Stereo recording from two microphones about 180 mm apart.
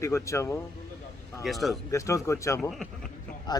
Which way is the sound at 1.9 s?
15° left (ahead or behind).